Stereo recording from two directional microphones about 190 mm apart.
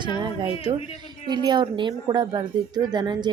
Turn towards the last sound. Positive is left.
turn(degrees=-25)  # may be behind; listen again after turning